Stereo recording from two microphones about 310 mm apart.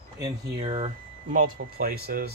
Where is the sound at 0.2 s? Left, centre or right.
Centre.